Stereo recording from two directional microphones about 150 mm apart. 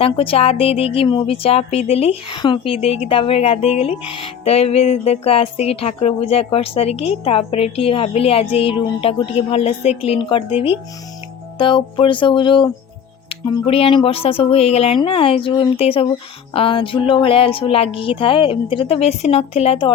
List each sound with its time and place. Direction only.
0.0 s a woman's voice: 40° left (ahead or behind)